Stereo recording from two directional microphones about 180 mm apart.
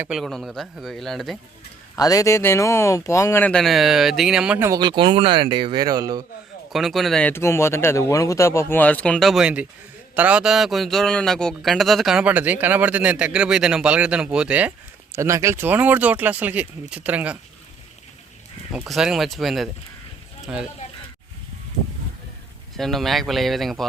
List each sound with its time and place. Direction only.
0.0 s a man's voice: centre (ahead or behind)
2.0 s speech: 20° left (ahead or behind); by 4.7 s 5° right (ahead or behind)
4.7 s speech: 25° right (ahead or behind)
6.7 s a man's voice: centre (ahead or behind)
18.7 s a man's voice: 5° right (ahead or behind)
22.8 s a man's voice: centre (ahead or behind)